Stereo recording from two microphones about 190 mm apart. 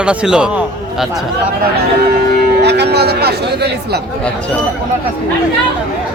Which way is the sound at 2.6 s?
60° right (ahead or behind).